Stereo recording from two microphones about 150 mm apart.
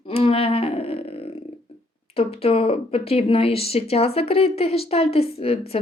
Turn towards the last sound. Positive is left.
turn(degrees=40)  # may be behind; listen again after turning